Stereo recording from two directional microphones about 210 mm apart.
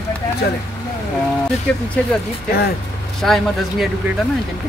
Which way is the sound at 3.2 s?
Centre (ahead or behind).